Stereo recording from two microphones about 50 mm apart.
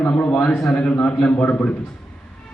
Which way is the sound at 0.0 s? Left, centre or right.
Left.